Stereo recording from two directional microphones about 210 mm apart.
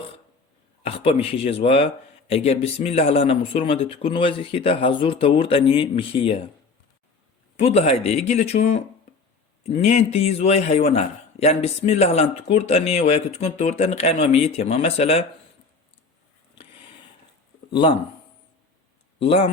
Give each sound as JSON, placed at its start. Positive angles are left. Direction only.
{"t": 0.8, "sound": "speech", "side_deg": 30}
{"t": 7.5, "sound": "speech", "side_deg": 30}
{"t": 9.8, "sound": "speech", "side_deg": 30}
{"t": 17.7, "sound": "speech", "side_deg": 25}
{"t": 19.2, "sound": "speech", "side_deg": 25}